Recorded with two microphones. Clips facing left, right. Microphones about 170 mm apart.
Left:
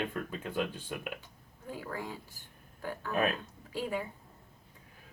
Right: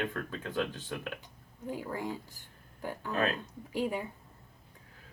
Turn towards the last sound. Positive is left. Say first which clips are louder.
# right 2 dB
turn(degrees=-15)  # may be behind; listen again after turning